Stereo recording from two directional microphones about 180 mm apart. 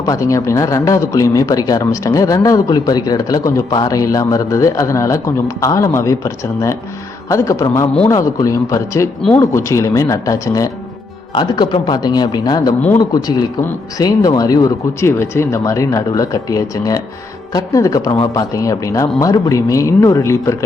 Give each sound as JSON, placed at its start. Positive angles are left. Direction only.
{"t": 0.0, "sound": "speech", "side_deg": 15}
{"t": 14.0, "sound": "speech", "side_deg": 20}